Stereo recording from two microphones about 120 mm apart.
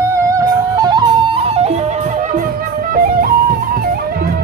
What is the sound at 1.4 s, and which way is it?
Music, 60° right (ahead or behind).